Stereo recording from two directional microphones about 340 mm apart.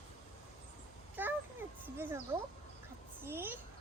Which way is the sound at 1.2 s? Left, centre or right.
Centre.